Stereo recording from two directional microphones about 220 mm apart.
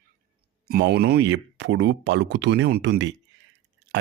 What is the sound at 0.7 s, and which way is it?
Speech, 45° right (ahead or behind).